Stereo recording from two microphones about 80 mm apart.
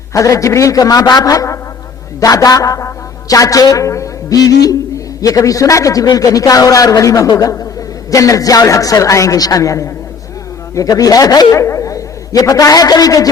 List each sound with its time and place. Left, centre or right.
0.1 s a man's voice: left
11.5 s a man's voice: left